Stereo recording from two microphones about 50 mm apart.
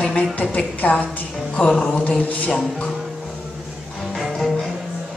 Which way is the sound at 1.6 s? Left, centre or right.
Centre.